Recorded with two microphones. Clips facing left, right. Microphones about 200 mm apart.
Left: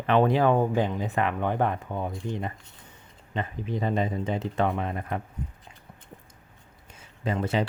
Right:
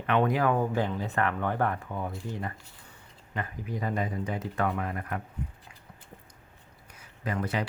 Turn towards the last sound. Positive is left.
turn(degrees=25)  # may be behind; listen again after turning